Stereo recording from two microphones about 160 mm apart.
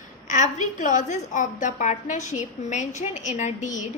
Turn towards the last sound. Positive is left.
turn(degrees=50)  # may be behind; listen again after turning